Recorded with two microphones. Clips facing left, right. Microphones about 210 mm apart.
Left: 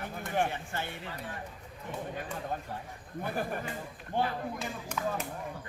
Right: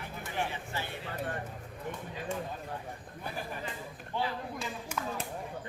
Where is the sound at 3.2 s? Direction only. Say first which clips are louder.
Left 6 dB; 50° left (ahead or behind).